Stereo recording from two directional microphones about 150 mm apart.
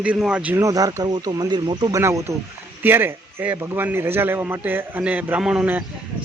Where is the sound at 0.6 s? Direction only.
25° right (ahead or behind).